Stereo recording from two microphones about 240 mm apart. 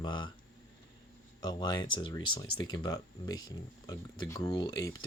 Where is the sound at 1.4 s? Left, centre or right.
Centre.